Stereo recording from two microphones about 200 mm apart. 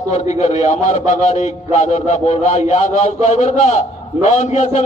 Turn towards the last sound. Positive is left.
turn(degrees=35)  # may be behind; listen again after turning